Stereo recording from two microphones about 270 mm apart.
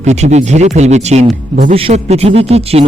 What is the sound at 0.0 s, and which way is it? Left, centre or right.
Speech, right.